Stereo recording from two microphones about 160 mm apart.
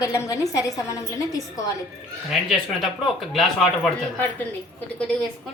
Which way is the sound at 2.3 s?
Centre (ahead or behind).